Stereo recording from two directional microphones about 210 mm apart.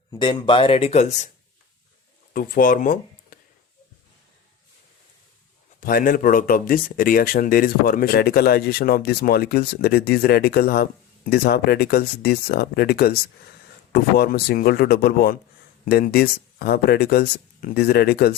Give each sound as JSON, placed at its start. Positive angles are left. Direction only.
{"t": 0.1, "sound": "speech", "side_deg": 20}
{"t": 2.3, "sound": "speech", "side_deg": 45}
{"t": 5.8, "sound": "speech", "side_deg": 40}